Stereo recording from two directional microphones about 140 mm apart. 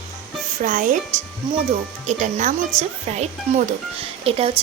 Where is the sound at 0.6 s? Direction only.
70° right (ahead or behind).